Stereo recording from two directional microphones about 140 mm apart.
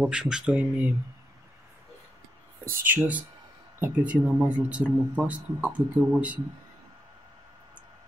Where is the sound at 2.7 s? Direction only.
15° right (ahead or behind).